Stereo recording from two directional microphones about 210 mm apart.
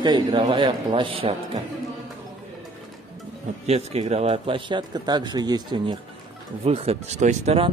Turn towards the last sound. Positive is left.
turn(degrees=-30)  # may be behind; listen again after turning